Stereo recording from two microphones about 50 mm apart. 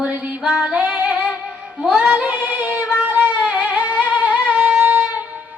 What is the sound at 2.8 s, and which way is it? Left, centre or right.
Music, right.